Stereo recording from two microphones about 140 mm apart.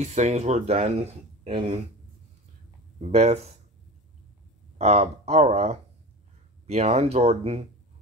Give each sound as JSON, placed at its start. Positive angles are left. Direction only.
{"t": 0.0, "sound": "speech", "side_deg": -55}
{"t": 3.0, "sound": "speech", "side_deg": -45}
{"t": 4.7, "sound": "speech", "side_deg": -50}